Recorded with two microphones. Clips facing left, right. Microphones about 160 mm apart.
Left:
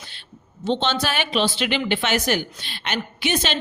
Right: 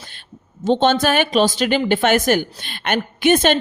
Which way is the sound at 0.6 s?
45° right (ahead or behind).